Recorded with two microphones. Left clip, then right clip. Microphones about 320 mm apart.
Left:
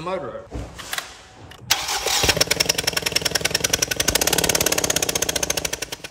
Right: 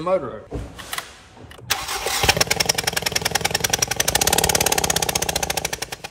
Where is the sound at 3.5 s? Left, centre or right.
Centre.